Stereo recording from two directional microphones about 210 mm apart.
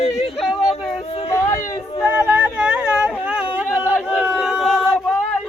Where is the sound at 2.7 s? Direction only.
5° right (ahead or behind).